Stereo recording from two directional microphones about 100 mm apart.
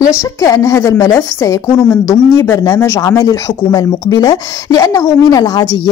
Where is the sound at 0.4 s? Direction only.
35° left (ahead or behind).